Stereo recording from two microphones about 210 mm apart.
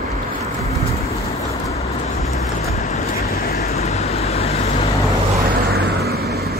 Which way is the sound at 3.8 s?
30° left (ahead or behind).